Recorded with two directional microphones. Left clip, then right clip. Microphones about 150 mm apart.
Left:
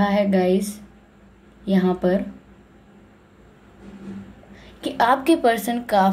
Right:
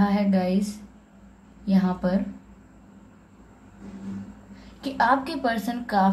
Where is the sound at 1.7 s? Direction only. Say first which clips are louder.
Left 6 dB; 35° left (ahead or behind).